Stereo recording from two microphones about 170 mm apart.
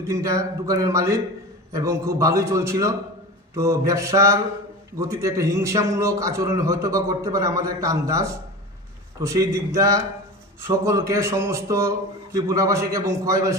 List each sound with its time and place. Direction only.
0.1 s a man's voice: 20° right (ahead or behind)